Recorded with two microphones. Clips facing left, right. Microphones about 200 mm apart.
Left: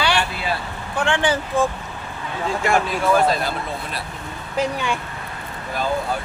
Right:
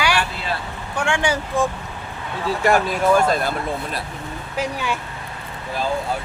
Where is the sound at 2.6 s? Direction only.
40° right (ahead or behind).